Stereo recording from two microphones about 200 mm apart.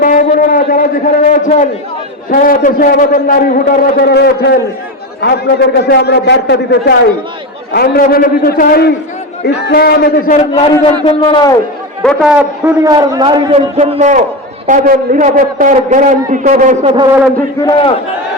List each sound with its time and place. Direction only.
0.0 s a man's voice: 45° left (ahead or behind)
5.8 s a man's voice: 55° left (ahead or behind)
7.7 s a man's voice: 50° left (ahead or behind)
10.3 s a man's voice: 30° left (ahead or behind)
12.0 s a man's voice: 5° right (ahead or behind); by 16.7 s 40° right (ahead or behind)
17.6 s a man's voice: 20° left (ahead or behind)